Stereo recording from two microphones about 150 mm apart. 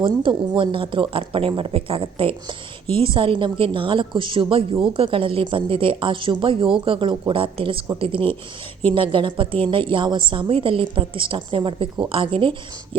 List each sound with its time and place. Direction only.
0.0 s a woman's voice: 35° right (ahead or behind)